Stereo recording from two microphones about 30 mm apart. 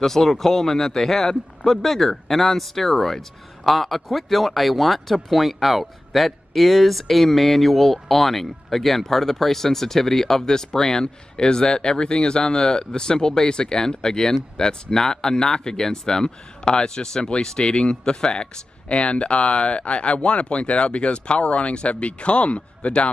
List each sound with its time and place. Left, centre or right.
0.0 s a man's voice: centre; by 23.0 s left